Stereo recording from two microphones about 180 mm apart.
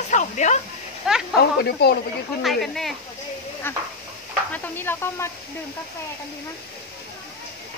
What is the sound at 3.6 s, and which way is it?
Speech, 10° left (ahead or behind).